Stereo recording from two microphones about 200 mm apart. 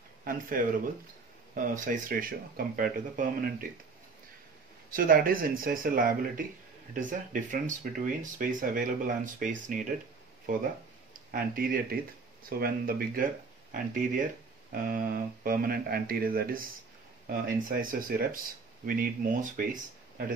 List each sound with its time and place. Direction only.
0.2 s speech: 45° right (ahead or behind)
4.9 s speech: 45° right (ahead or behind)
11.3 s speech: 45° right (ahead or behind)